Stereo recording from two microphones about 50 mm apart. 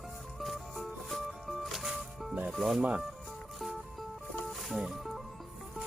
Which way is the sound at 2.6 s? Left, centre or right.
Centre.